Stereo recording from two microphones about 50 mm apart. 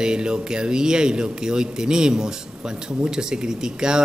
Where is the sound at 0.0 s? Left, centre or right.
Centre.